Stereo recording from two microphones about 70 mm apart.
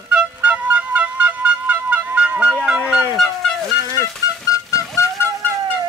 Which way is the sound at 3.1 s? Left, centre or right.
Centre.